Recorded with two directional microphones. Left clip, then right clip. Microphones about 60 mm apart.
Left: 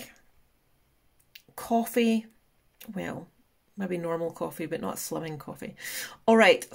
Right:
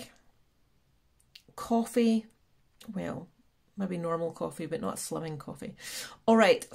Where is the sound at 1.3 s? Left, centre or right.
Centre.